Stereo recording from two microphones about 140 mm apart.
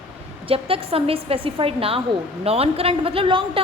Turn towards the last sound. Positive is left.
turn(degrees=-40)  # may be behind; listen again after turning